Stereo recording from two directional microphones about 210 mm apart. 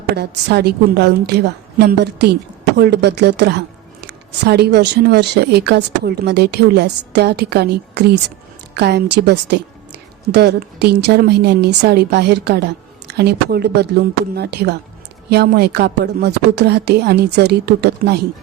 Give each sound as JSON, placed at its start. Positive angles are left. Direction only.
{"t": 0.2, "sound": "speech", "side_deg": -50}